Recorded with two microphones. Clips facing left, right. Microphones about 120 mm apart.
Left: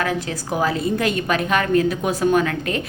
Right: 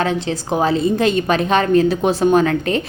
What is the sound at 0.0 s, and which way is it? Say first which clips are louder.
A woman's voice: right 4 dB; 25° right (ahead or behind).